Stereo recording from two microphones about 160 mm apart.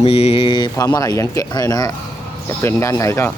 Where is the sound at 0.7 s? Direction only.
20° left (ahead or behind).